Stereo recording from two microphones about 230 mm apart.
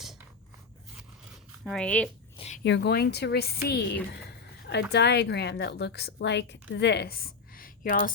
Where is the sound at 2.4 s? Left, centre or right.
Left.